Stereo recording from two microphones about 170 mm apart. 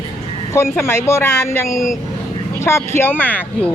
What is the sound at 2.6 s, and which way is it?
Speech, 15° left (ahead or behind).